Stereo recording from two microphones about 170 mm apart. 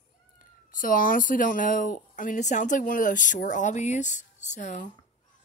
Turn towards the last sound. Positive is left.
turn(degrees=45)  # may be behind; listen again after turning